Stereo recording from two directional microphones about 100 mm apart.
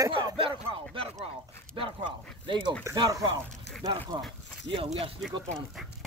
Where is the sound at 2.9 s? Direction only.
40° right (ahead or behind).